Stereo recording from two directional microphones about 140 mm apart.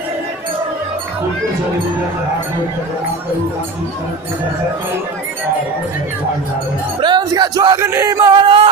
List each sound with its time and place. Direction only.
7.0 s speech: 30° right (ahead or behind)